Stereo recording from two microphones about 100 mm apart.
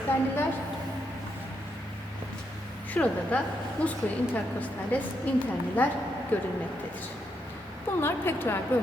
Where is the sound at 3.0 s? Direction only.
15° left (ahead or behind).